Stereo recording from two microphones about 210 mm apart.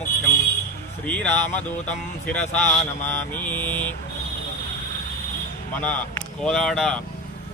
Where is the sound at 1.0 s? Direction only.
5° left (ahead or behind).